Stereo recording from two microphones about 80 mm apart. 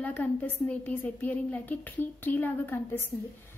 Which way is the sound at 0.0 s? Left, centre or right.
Centre.